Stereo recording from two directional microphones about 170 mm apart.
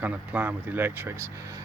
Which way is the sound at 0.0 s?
10° right (ahead or behind).